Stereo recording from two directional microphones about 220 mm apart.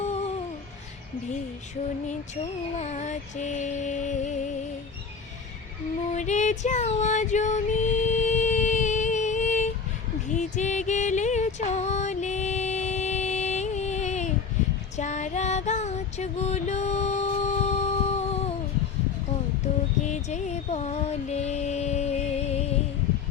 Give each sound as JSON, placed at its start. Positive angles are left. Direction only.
{"t": 0.0, "sound": "music", "side_deg": 30}
{"t": 2.0, "sound": "mantra", "side_deg": 30}
{"t": 6.1, "sound": "female singing", "side_deg": 30}
{"t": 10.2, "sound": "music", "side_deg": 35}
{"t": 14.9, "sound": "female singing", "side_deg": 30}
{"t": 20.1, "sound": "music", "side_deg": 30}